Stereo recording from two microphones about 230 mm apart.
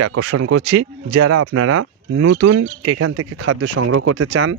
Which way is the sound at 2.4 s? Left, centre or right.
Right.